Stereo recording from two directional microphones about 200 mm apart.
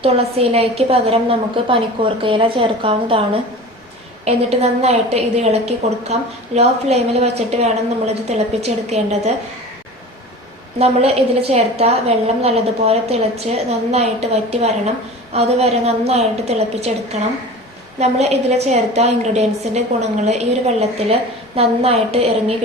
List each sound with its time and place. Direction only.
0.0 s a woman's voice: 30° right (ahead or behind)
4.3 s a woman's voice: 30° right (ahead or behind)
10.8 s a woman's voice: 30° right (ahead or behind)